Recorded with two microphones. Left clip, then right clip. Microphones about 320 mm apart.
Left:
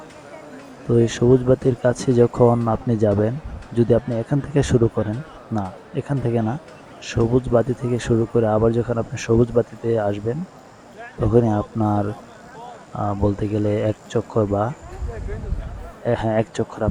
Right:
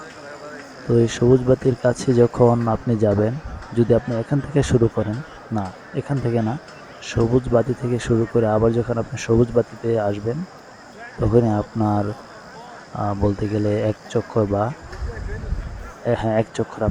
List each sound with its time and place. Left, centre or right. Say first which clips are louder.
0.9 s speech: even; centre
16.0 s speech: even; centre